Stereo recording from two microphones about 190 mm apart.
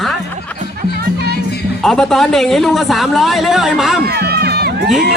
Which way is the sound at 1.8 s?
Centre (ahead or behind).